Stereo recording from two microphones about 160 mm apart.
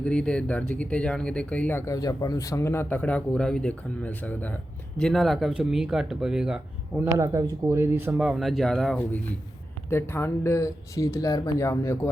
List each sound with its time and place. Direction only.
0.0 s speech: 5° left (ahead or behind)
7.1 s speech: 20° right (ahead or behind); by 9.0 s 5° left (ahead or behind)
9.9 s speech: 15° left (ahead or behind)